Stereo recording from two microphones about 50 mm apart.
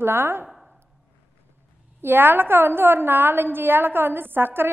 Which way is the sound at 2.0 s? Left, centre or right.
Right.